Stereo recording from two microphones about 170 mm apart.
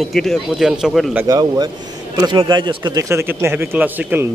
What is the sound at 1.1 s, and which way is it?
A man's voice, 20° right (ahead or behind).